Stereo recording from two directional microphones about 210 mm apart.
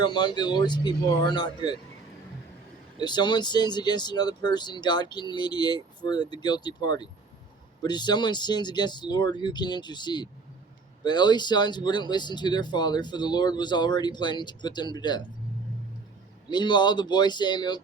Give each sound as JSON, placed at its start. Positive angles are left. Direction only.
{"t": 0.0, "sound": "speech", "side_deg": 20}
{"t": 3.0, "sound": "speech", "side_deg": 20}
{"t": 16.5, "sound": "speech", "side_deg": 20}